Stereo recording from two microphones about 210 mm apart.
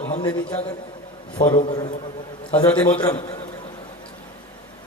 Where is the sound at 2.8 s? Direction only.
20° left (ahead or behind).